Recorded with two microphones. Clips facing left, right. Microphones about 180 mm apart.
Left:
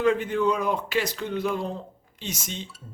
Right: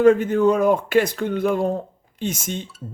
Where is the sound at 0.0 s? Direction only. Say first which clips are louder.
Right 8 dB; 45° right (ahead or behind).